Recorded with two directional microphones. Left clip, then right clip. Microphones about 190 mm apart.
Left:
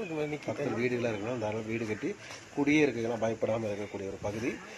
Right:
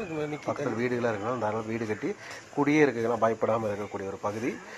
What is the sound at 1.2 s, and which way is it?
Speech, centre (ahead or behind).